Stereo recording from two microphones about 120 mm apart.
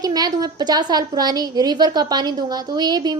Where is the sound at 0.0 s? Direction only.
30° right (ahead or behind).